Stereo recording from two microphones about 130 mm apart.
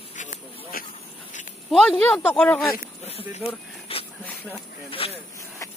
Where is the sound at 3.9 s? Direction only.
45° left (ahead or behind).